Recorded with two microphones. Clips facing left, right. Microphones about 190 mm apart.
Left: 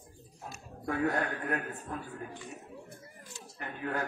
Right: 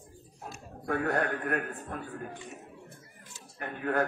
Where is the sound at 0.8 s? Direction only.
65° right (ahead or behind).